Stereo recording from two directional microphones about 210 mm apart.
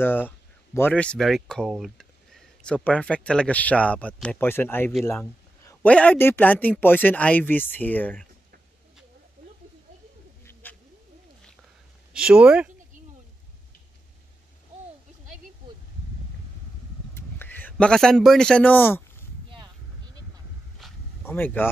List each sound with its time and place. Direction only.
0.0 s speech: 10° left (ahead or behind)
10.4 s a sound: 10° left (ahead or behind)
12.1 s speech: 5° right (ahead or behind)
17.1 s a man's voice: 10° left (ahead or behind)
20.8 s zipper: centre (ahead or behind)
21.2 s speech: 10° left (ahead or behind)